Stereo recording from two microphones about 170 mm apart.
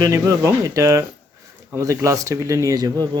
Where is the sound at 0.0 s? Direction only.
15° right (ahead or behind).